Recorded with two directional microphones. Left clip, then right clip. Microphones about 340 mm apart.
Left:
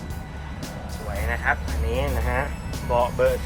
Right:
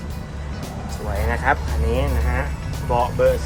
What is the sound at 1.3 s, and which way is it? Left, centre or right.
A man's voice, centre.